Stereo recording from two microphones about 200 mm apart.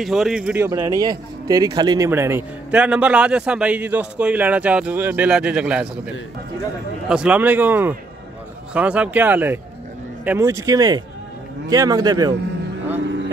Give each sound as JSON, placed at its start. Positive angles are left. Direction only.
{"t": 0.0, "sound": "speech", "side_deg": 0}
{"t": 0.7, "sound": "a man's voice", "side_deg": -15}
{"t": 7.1, "sound": "a man's voice", "side_deg": -5}